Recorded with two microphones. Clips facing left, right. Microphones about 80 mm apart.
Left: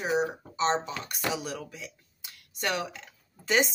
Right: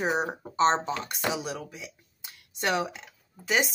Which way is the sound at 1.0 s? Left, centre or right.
Right.